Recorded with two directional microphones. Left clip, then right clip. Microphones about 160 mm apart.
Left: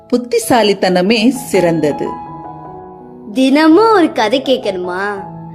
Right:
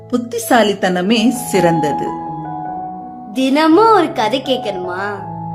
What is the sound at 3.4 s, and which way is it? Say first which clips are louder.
A woman's voice: left 2 dB; 25° left (ahead or behind).